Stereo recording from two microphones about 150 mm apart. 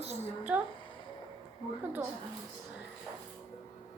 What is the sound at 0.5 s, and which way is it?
Speech, 10° right (ahead or behind).